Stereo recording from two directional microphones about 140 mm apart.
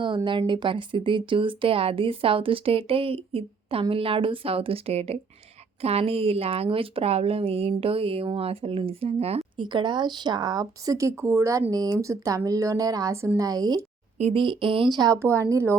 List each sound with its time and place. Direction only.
0.3 s a woman's voice: 35° right (ahead or behind)
9.6 s a woman's voice: 35° right (ahead or behind)
14.2 s a woman's voice: 40° right (ahead or behind); by 15.8 s 20° right (ahead or behind)